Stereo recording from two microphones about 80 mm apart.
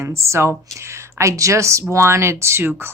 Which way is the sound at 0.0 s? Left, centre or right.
Right.